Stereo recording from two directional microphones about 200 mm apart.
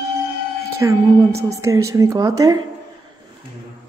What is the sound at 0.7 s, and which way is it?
A woman's voice, 15° right (ahead or behind).